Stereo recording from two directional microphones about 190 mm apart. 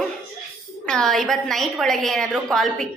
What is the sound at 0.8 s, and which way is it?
A woman's voice, 5° left (ahead or behind).